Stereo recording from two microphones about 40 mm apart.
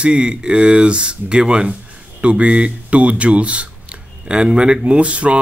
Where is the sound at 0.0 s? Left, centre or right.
Right.